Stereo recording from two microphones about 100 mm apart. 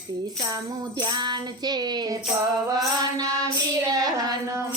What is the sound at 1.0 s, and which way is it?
Music, 45° right (ahead or behind).